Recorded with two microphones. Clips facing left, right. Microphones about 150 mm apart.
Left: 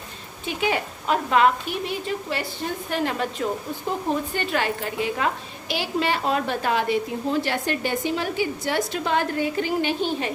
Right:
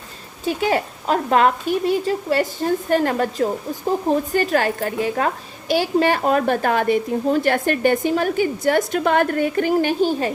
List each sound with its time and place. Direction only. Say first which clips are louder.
0.4 s a woman's voice: right 5 dB; 40° right (ahead or behind)